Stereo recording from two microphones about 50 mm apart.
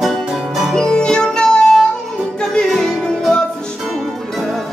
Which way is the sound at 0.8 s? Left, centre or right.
Centre.